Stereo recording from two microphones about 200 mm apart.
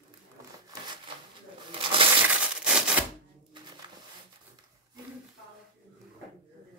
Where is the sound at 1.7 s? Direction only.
25° right (ahead or behind).